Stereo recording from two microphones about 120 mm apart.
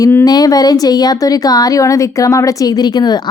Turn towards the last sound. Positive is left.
turn(degrees=35)  # may be behind; listen again after turning